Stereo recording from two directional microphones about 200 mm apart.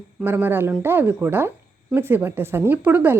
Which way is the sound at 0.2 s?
10° right (ahead or behind).